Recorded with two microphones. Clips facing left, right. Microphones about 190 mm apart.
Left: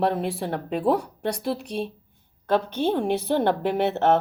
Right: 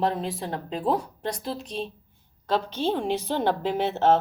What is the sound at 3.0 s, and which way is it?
A woman's voice, 55° left (ahead or behind).